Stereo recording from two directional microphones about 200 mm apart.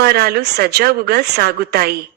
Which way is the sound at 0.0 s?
50° right (ahead or behind).